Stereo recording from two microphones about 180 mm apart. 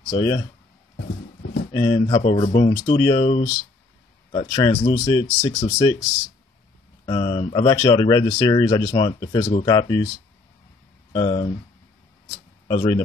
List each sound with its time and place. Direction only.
0.1 s speech: 25° left (ahead or behind)
1.7 s speech: 25° left (ahead or behind)
2.7 s speech: 20° left (ahead or behind)
4.3 s speech: 25° left (ahead or behind)
7.1 s speech: 25° left (ahead or behind)
11.1 s speech: 30° left (ahead or behind)
12.6 s speech: 25° left (ahead or behind)